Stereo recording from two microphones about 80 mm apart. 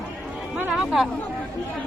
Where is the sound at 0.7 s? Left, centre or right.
Centre.